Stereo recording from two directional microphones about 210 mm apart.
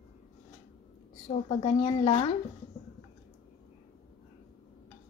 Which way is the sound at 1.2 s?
25° left (ahead or behind).